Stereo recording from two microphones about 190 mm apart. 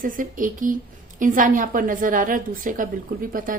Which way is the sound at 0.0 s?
45° right (ahead or behind).